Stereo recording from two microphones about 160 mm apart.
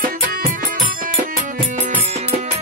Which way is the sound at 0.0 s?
65° right (ahead or behind).